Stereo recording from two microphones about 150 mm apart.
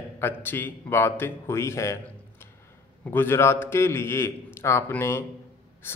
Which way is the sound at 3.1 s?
15° left (ahead or behind).